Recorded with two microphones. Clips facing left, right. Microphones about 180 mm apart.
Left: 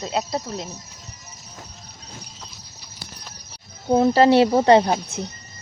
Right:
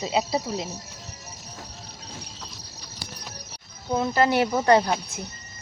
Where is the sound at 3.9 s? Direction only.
35° left (ahead or behind).